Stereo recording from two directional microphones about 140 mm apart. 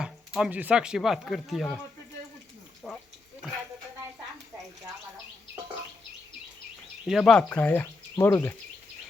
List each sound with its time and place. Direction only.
0.0 s speech: 5° right (ahead or behind)
2.8 s a sound: centre (ahead or behind)
7.0 s speech: centre (ahead or behind)
7.5 s speech: 15° left (ahead or behind)